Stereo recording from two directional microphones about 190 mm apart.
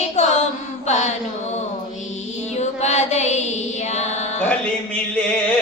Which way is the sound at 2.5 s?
35° left (ahead or behind).